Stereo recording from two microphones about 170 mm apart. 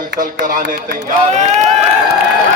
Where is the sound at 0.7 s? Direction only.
45° right (ahead or behind).